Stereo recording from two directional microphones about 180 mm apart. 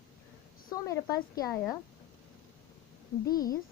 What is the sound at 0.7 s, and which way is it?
A woman's voice, 20° left (ahead or behind).